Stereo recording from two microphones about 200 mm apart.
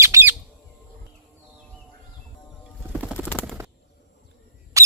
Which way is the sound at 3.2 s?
10° left (ahead or behind).